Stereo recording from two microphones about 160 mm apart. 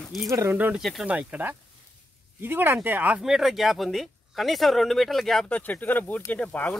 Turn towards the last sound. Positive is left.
turn(degrees=10)  # may be behind; listen again after turning